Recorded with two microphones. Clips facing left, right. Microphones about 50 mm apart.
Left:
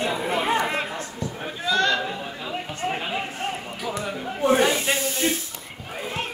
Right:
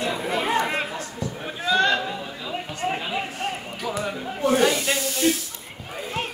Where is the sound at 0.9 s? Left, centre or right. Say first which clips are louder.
Even; left.